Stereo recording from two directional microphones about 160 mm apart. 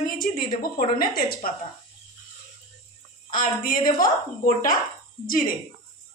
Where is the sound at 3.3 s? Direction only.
60° left (ahead or behind).